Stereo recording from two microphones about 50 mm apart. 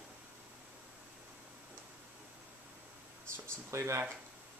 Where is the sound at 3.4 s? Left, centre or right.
Right.